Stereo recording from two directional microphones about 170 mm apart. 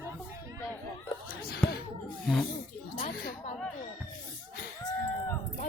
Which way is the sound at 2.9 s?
60° left (ahead or behind).